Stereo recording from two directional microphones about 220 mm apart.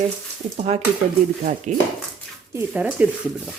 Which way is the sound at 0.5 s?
30° right (ahead or behind).